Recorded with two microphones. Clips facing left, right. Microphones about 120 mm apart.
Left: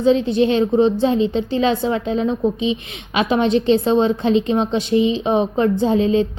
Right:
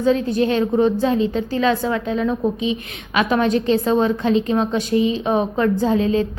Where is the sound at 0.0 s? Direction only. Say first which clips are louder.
Left 2 dB; 25° left (ahead or behind).